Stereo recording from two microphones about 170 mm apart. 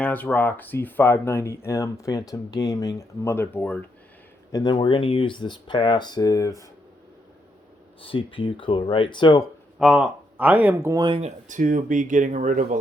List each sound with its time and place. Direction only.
0.0 s speech: 10° left (ahead or behind)
4.5 s speech: 25° left (ahead or behind)
8.0 s speech: 30° left (ahead or behind)
9.7 s speech: centre (ahead or behind)
10.9 s speech: 30° right (ahead or behind); by 12.8 s 50° right (ahead or behind)